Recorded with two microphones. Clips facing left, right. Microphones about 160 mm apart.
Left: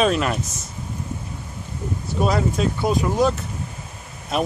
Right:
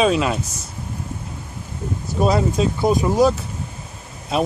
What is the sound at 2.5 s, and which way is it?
Speech, 15° right (ahead or behind).